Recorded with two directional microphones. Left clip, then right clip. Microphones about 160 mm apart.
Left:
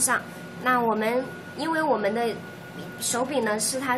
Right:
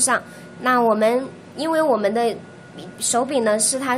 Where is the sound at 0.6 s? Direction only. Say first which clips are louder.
Right 6 dB; 75° right (ahead or behind).